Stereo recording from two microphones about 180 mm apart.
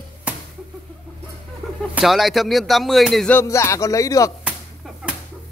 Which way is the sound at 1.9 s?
Centre (ahead or behind).